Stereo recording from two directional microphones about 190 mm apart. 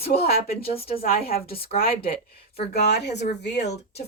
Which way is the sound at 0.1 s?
40° left (ahead or behind).